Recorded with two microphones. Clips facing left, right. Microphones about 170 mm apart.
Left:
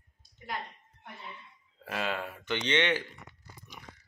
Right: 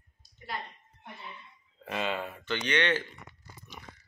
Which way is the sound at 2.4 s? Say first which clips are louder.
Left 1 dB; 20° left (ahead or behind).